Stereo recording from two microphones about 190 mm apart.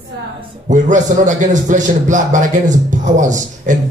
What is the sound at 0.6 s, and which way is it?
A man's voice, 40° right (ahead or behind).